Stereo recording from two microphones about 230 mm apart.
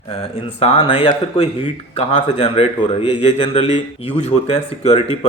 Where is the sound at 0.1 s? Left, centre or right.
Left.